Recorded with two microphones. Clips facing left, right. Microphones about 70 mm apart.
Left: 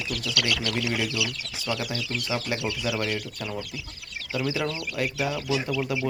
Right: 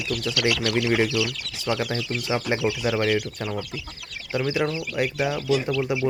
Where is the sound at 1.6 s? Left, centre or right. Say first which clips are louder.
Right 5 dB; right.